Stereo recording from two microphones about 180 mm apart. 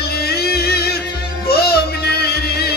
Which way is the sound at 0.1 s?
60° left (ahead or behind).